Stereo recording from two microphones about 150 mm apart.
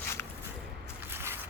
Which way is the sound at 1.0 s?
15° right (ahead or behind).